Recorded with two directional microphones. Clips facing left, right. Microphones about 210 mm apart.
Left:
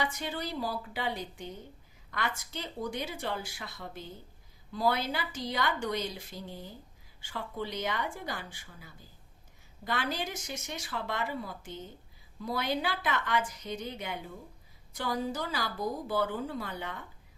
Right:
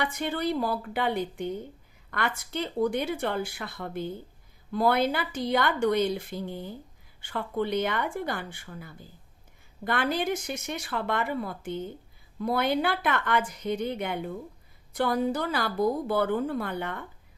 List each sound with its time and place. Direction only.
0.0 s a woman's voice: 60° right (ahead or behind)